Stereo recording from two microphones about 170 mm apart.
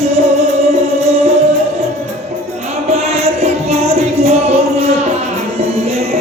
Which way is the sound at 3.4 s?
40° right (ahead or behind).